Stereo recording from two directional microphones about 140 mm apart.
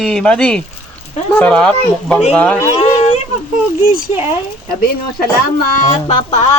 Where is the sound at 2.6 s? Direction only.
50° left (ahead or behind).